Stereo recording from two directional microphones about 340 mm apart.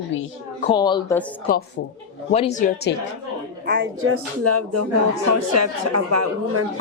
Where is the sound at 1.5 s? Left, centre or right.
Left.